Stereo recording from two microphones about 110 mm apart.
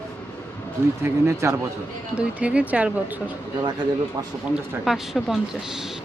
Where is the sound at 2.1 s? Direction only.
10° right (ahead or behind).